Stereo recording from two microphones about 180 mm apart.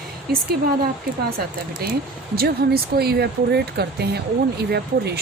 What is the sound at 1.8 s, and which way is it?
Speech, 60° right (ahead or behind).